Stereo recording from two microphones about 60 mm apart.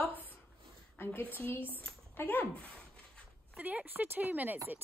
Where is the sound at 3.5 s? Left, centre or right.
Right.